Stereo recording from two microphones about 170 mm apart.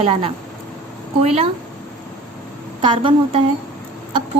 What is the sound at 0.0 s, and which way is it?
Speech, 35° right (ahead or behind).